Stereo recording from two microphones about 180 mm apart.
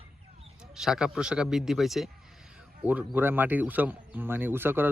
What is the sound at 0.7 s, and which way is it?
A man's voice, 5° right (ahead or behind).